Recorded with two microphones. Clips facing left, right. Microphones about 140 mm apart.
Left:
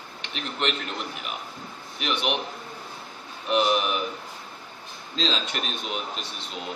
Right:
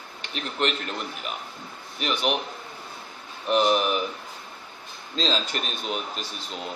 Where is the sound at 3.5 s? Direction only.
Centre (ahead or behind).